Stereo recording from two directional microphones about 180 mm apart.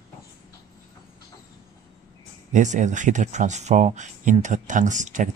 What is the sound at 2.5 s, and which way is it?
Speech, 40° right (ahead or behind).